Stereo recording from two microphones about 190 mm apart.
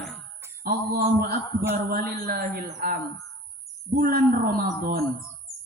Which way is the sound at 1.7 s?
45° right (ahead or behind).